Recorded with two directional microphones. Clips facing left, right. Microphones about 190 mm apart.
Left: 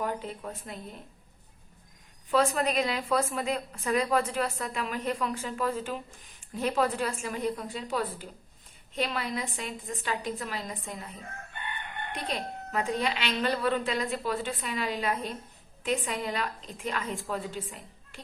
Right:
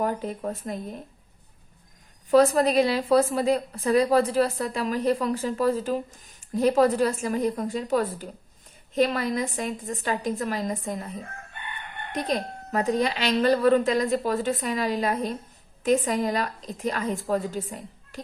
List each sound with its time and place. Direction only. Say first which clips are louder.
0.0 s a woman's voice: right 6 dB; 45° right (ahead or behind)
2.3 s a woman's voice: right 7 dB; 40° right (ahead or behind)
12.1 s a woman's voice: right 8 dB; 40° right (ahead or behind)